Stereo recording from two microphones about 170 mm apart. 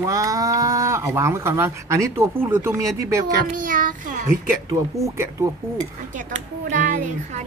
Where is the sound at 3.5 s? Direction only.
50° right (ahead or behind).